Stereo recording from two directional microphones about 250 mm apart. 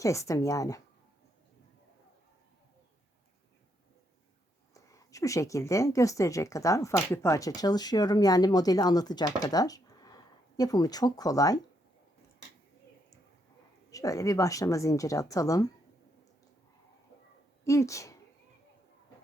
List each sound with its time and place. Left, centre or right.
0.0 s a woman's voice: centre
4.7 s a woman's voice: centre
13.9 s a woman's voice: centre
17.7 s a woman's voice: centre